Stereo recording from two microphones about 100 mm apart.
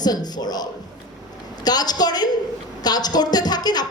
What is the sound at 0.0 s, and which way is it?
A man's voice, 40° left (ahead or behind).